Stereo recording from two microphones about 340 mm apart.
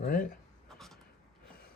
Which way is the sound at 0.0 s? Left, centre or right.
Left.